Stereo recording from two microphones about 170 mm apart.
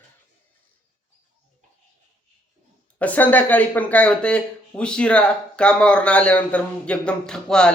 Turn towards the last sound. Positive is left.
turn(degrees=5)  # may be behind; listen again after turning